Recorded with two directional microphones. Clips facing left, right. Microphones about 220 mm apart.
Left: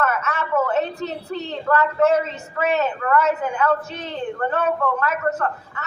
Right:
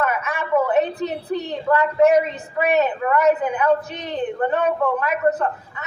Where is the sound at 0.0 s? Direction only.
15° right (ahead or behind).